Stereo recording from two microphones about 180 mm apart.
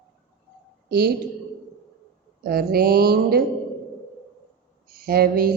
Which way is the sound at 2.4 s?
55° right (ahead or behind).